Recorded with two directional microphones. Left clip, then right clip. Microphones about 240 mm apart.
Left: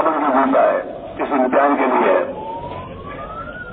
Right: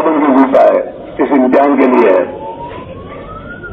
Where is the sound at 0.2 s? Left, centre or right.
Right.